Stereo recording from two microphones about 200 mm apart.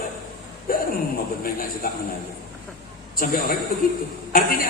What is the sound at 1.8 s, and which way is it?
Speech, 45° left (ahead or behind).